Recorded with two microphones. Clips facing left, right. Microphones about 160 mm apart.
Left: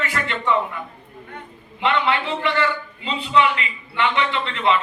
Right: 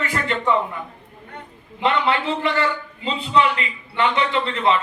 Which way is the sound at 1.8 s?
40° right (ahead or behind).